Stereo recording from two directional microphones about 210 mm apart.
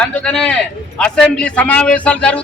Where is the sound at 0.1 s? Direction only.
5° left (ahead or behind).